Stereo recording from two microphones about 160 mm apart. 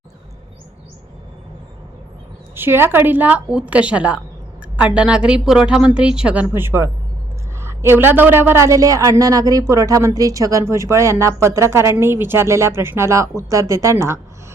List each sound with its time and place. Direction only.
2.6 s a woman's voice: 15° right (ahead or behind)